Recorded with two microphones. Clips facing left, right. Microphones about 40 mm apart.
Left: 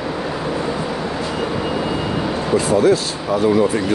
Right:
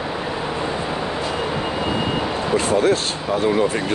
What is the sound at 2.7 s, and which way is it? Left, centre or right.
Speech, right.